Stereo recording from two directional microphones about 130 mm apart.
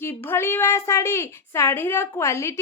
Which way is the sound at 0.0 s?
15° left (ahead or behind).